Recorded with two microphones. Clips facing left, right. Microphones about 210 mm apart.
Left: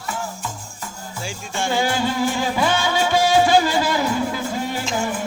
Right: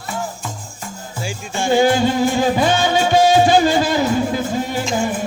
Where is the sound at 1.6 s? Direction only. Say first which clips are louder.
Right 7 dB; 20° right (ahead or behind).